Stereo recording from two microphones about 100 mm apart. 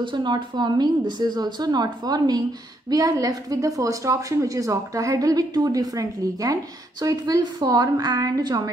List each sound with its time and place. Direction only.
0.0 s a woman's voice: 50° right (ahead or behind)